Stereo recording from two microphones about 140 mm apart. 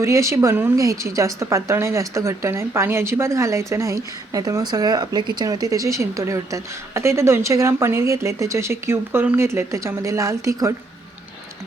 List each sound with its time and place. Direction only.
0.0 s speech: 20° right (ahead or behind)